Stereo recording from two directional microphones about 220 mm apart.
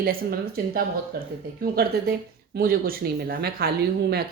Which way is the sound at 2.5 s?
40° right (ahead or behind).